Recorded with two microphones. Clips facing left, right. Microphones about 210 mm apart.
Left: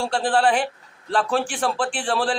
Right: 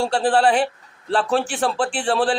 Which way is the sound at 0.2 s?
40° right (ahead or behind).